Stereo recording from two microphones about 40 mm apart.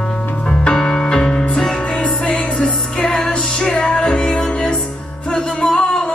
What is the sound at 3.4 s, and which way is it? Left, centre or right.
Music, centre.